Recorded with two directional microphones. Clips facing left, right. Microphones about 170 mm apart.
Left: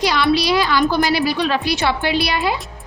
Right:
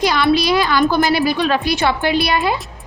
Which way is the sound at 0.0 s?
50° right (ahead or behind).